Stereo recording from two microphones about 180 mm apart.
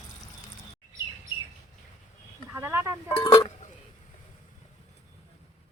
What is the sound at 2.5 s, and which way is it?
Speech, 10° right (ahead or behind).